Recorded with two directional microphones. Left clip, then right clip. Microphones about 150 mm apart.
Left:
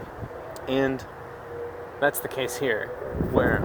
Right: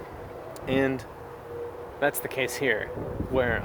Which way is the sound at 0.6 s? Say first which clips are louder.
Left 1 dB; 15° right (ahead or behind).